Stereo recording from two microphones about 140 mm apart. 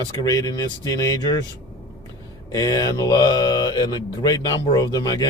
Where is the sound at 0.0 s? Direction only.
25° left (ahead or behind).